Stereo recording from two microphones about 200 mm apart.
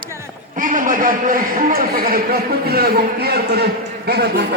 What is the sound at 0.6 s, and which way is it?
A man's voice, 40° right (ahead or behind).